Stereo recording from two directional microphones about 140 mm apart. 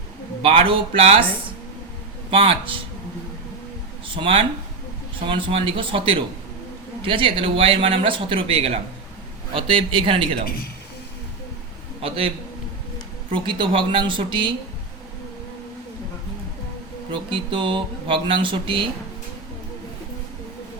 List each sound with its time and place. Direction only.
0.4 s speech: 40° right (ahead or behind)
2.3 s speech: 40° right (ahead or behind)
4.1 s speech: 40° right (ahead or behind)
13.3 s speech: 35° right (ahead or behind)
17.1 s speech: 35° right (ahead or behind)